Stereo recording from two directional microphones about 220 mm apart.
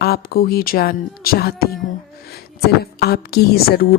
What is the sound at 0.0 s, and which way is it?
A woman's voice, 45° left (ahead or behind).